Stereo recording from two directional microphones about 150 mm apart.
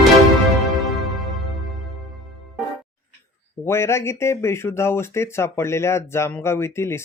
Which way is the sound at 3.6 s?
15° left (ahead or behind).